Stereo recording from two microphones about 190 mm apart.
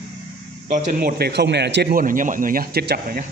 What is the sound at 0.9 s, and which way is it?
A man's voice, 50° right (ahead or behind).